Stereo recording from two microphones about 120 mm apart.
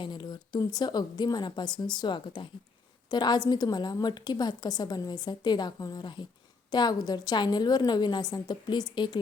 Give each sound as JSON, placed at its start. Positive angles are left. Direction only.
{"t": 0.0, "sound": "a woman's voice", "side_deg": 40}